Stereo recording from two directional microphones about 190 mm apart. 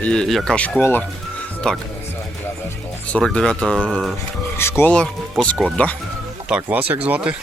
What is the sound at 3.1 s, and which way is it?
Speech, 5° left (ahead or behind).